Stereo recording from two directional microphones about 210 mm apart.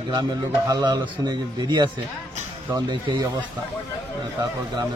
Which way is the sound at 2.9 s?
20° right (ahead or behind).